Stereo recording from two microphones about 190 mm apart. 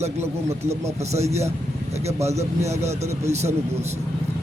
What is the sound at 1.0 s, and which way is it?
Speech, 35° right (ahead or behind).